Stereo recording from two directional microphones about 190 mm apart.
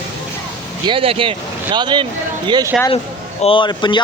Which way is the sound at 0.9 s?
30° right (ahead or behind).